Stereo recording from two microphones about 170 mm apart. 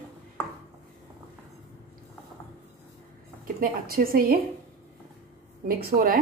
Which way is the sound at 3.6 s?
55° right (ahead or behind).